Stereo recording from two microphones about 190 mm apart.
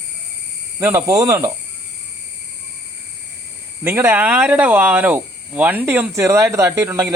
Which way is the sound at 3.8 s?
10° right (ahead or behind).